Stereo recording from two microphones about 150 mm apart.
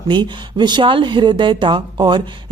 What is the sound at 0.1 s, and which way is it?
Speech, 30° right (ahead or behind).